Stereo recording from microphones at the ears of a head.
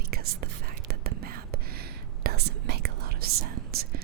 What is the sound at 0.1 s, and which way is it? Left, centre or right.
Whispering, right.